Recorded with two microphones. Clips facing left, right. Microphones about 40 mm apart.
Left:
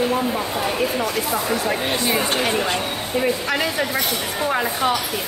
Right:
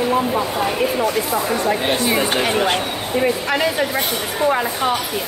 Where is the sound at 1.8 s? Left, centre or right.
Centre.